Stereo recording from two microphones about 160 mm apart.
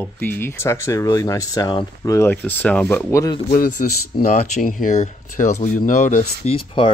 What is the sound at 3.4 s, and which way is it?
Speech, 60° left (ahead or behind).